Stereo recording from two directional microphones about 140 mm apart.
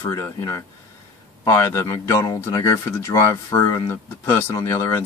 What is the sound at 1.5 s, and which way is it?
Speech, 20° left (ahead or behind).